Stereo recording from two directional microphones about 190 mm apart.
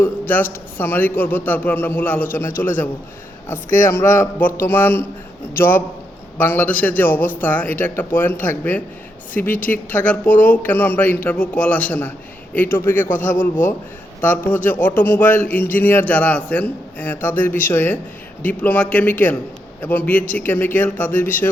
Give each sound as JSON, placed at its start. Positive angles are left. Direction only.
{"t": 0.0, "sound": "a man's voice", "side_deg": 10}
{"t": 4.0, "sound": "speech", "side_deg": 45}
{"t": 4.6, "sound": "a man's voice", "side_deg": 10}
{"t": 13.1, "sound": "speech", "side_deg": 45}
{"t": 14.2, "sound": "a man's voice", "side_deg": 10}